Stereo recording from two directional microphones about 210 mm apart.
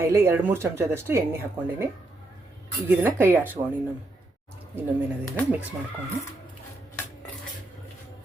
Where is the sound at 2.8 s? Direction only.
10° right (ahead or behind).